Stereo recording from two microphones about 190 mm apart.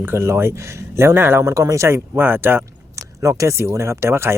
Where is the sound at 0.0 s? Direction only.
10° right (ahead or behind).